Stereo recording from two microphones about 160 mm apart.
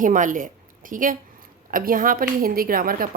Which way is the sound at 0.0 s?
55° right (ahead or behind).